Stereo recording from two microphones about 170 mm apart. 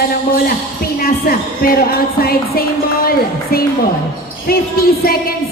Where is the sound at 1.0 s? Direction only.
60° left (ahead or behind).